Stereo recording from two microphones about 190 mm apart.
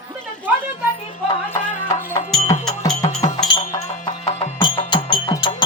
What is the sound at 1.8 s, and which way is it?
Music, 40° left (ahead or behind).